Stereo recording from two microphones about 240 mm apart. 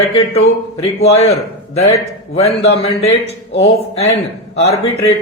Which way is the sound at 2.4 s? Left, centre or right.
Left.